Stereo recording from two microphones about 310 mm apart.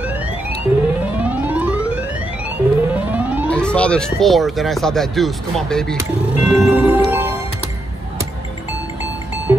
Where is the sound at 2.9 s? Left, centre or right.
Centre.